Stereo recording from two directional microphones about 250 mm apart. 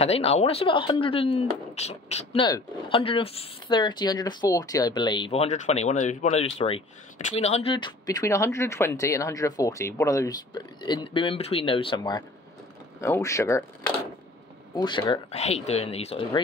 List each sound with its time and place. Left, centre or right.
0.0 s speech: left
14.8 s speech: centre